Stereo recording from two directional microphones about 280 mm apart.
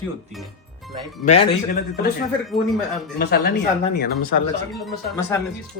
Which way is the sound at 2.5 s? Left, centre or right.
Centre.